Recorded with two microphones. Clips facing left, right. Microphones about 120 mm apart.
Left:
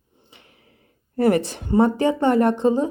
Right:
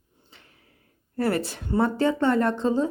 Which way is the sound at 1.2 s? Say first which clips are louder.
Left 6 dB; 15° left (ahead or behind).